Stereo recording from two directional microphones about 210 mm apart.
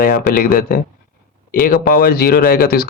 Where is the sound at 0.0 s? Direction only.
45° left (ahead or behind).